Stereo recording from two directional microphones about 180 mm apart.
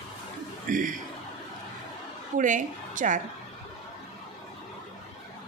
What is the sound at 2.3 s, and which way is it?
Speech, 45° right (ahead or behind).